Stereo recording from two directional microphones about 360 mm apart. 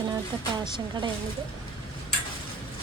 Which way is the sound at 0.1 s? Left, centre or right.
Centre.